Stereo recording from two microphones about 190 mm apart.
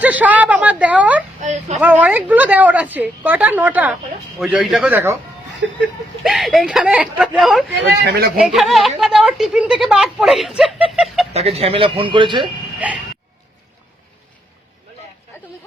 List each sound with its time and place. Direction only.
0.0 s a woman's voice: 10° right (ahead or behind)
1.4 s a sound: 40° right (ahead or behind)
1.8 s a woman's voice: 10° right (ahead or behind)
6.2 s a woman's voice: centre (ahead or behind)
7.8 s speech: 65° right (ahead or behind)
8.4 s a woman's voice: centre (ahead or behind)
10.9 s chicken: centre (ahead or behind)
11.3 s speech: 30° right (ahead or behind)
12.8 s a woman's voice: 5° right (ahead or behind)